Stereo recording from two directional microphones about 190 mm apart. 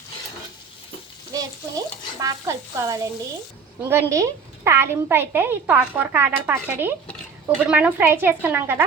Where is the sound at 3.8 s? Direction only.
15° right (ahead or behind).